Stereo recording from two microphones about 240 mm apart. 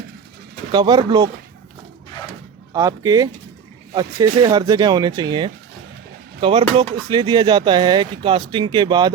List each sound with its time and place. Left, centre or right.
0.7 s speech: centre
2.7 s speech: centre